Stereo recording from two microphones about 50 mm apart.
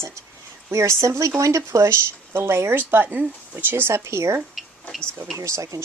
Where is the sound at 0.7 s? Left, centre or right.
Right.